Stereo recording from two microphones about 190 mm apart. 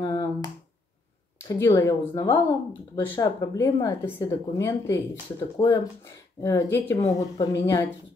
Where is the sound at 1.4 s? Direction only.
15° left (ahead or behind).